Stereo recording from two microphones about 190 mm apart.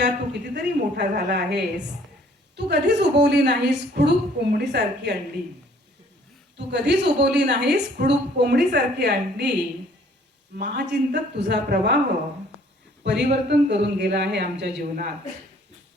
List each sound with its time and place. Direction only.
0.0 s a woman's voice: 65° right (ahead or behind)
6.6 s a woman's voice: 65° right (ahead or behind)
13.0 s a woman's voice: 65° right (ahead or behind)